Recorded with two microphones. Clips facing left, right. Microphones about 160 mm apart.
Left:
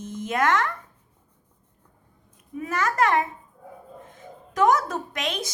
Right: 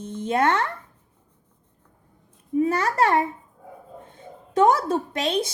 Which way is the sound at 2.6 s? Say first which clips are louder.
Right 3 dB; 30° right (ahead or behind).